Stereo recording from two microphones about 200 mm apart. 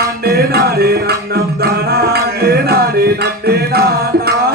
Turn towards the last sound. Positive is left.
turn(degrees=-50)  # may be behind; listen again after turning